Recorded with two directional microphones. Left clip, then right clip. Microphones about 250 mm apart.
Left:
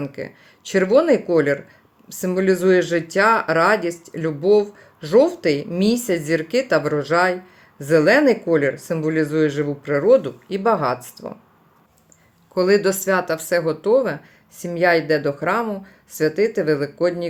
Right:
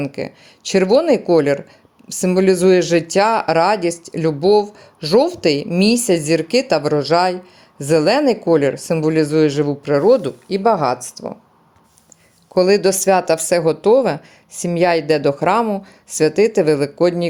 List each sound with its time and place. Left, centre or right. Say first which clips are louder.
0.1 s speech: right 5 dB; right
12.5 s speech: right 3 dB; right